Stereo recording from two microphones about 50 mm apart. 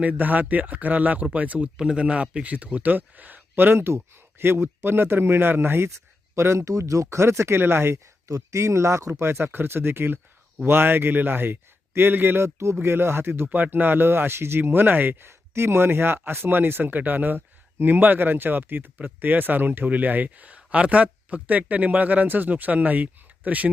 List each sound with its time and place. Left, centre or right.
0.0 s speech: right
1.7 s a man's voice: centre; by 5.9 s right
6.3 s speech: right
8.4 s speech: right
12.4 s speech: right
14.6 s speech: right
15.3 s speech: right